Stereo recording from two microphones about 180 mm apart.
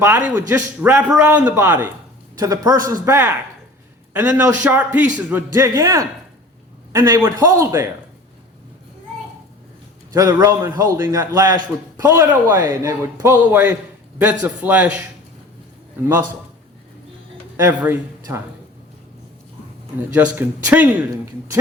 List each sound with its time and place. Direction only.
0.0 s a man's voice: 10° right (ahead or behind)
10.1 s a man's voice: 20° right (ahead or behind)
17.6 s a man's voice: 10° right (ahead or behind)
20.1 s a man's voice: 10° right (ahead or behind)